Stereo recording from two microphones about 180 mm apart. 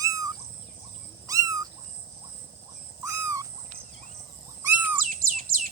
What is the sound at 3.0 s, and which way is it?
Owl, 20° right (ahead or behind).